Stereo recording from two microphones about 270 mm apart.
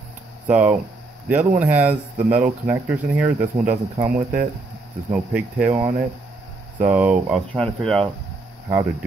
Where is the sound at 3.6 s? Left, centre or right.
Right.